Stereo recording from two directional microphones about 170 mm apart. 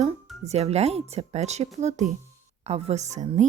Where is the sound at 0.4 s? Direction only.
40° right (ahead or behind).